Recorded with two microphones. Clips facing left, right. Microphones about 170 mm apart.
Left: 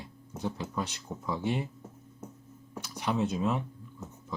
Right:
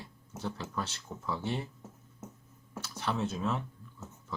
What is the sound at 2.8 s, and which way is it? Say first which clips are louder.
Speech: left 3 dB; 15° left (ahead or behind).